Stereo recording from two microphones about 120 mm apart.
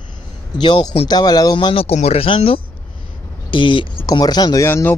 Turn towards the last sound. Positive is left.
turn(degrees=20)  # may be behind; listen again after turning